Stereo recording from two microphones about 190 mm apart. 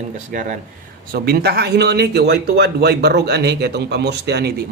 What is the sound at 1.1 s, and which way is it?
Speech, 55° right (ahead or behind).